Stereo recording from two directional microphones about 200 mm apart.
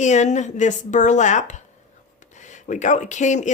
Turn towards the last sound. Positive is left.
turn(degrees=40)  # may be behind; listen again after turning